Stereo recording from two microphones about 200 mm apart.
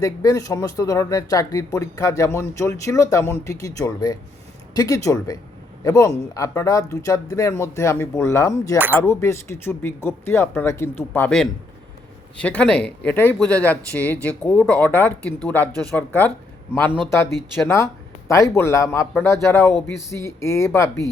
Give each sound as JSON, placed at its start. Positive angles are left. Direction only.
{"t": 0.0, "sound": "speech", "side_deg": 15}
{"t": 18.3, "sound": "speech", "side_deg": 15}